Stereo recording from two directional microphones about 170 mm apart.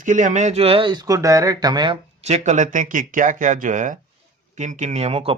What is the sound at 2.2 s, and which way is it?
Speech, 40° right (ahead or behind).